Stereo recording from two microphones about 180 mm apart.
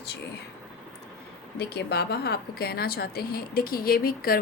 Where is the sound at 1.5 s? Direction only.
65° left (ahead or behind).